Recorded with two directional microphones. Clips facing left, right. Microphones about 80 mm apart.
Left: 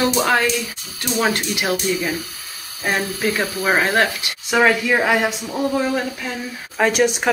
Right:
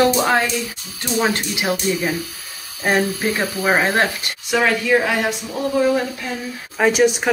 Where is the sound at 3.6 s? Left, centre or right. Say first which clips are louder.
Even; centre.